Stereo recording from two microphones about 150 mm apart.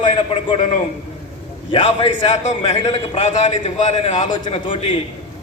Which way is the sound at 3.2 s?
50° left (ahead or behind).